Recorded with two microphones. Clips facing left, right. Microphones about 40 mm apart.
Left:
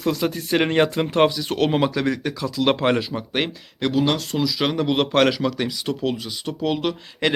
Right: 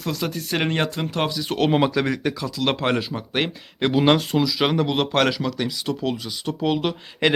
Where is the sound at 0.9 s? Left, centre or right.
Centre.